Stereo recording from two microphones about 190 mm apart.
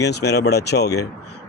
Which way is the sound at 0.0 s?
60° left (ahead or behind).